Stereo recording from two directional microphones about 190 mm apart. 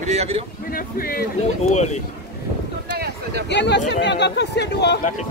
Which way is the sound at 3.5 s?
65° left (ahead or behind).